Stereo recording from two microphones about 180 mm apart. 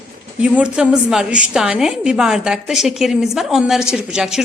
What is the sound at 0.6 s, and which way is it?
A woman's voice, 5° right (ahead or behind).